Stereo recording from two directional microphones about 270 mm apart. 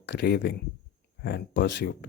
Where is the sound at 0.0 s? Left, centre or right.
Left.